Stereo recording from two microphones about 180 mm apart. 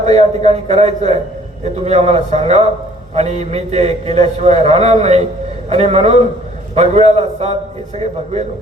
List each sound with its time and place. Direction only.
0.0 s a man's voice: 35° right (ahead or behind)